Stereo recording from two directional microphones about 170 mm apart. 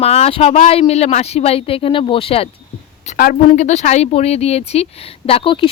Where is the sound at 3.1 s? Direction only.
50° left (ahead or behind).